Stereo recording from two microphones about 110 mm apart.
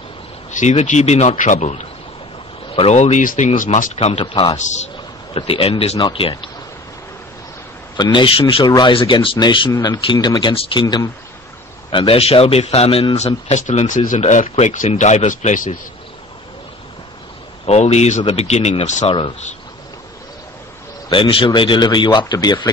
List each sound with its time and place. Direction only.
0.5 s speech: 90° left
2.7 s speech: 75° left (ahead or behind)
5.3 s a man's voice: 60° left (ahead or behind)
5.9 s speech: 50° left (ahead or behind)
7.9 s speech: 45° left (ahead or behind)
8.6 s speech: 40° left (ahead or behind)
9.7 s speech: 35° left (ahead or behind)
10.5 s a man's voice: 55° left (ahead or behind)
13.5 s speech: 90° left
17.6 s speech: 75° left (ahead or behind)
21.1 s speech: 50° left (ahead or behind)